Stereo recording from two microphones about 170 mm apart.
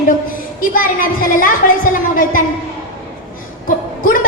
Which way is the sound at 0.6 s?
55° left (ahead or behind).